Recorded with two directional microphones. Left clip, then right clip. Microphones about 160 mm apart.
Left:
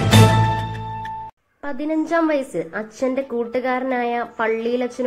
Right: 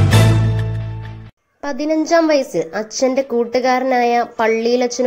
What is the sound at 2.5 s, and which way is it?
A woman's voice, 40° right (ahead or behind).